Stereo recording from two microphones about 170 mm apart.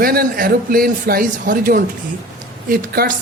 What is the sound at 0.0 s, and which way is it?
A man's voice, 60° right (ahead or behind).